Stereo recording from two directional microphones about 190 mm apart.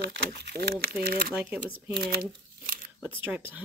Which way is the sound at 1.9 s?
50° right (ahead or behind).